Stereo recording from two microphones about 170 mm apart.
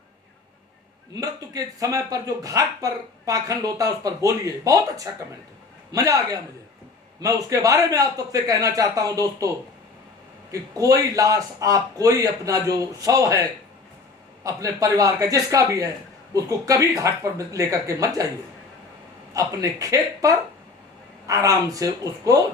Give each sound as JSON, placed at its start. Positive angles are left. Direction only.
{"t": 1.1, "sound": "speech", "side_deg": -20}
{"t": 10.5, "sound": "speech", "side_deg": -20}
{"t": 14.4, "sound": "speech", "side_deg": -20}
{"t": 19.3, "sound": "speech", "side_deg": -20}